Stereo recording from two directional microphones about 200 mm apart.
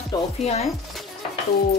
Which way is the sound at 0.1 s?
20° left (ahead or behind).